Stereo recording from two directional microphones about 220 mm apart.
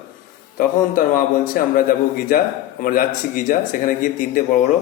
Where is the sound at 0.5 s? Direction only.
40° left (ahead or behind).